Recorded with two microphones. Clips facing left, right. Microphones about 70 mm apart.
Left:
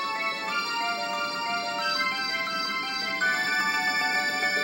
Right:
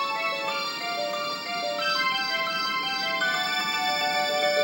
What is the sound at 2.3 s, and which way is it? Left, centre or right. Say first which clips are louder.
Music: right 2 dB; right.